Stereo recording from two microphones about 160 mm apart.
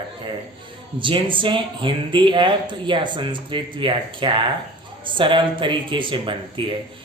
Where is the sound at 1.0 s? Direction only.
30° right (ahead or behind).